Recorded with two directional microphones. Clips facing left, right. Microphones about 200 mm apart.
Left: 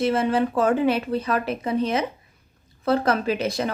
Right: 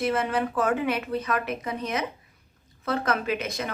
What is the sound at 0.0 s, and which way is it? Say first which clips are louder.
A woman's voice: left 5 dB; 30° left (ahead or behind).